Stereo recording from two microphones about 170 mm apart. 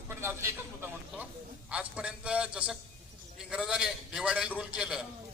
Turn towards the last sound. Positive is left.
turn(degrees=-5)  # may be behind; listen again after turning